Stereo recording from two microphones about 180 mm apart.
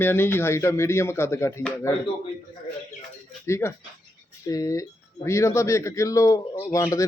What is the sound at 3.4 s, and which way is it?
Speech, 15° left (ahead or behind).